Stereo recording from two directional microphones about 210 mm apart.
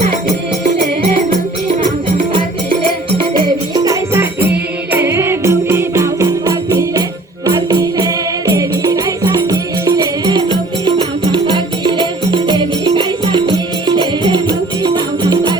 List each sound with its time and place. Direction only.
1.7 s music: 25° right (ahead or behind)